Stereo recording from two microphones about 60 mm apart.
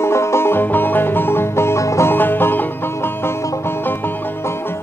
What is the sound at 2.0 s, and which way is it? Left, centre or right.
Music, left.